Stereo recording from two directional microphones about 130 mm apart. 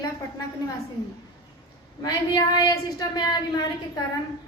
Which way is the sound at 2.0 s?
30° left (ahead or behind).